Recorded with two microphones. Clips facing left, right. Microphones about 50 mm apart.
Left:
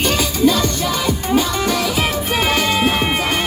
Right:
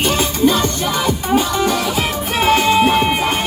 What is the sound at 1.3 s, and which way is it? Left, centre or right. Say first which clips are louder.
Music: right 1 dB; centre.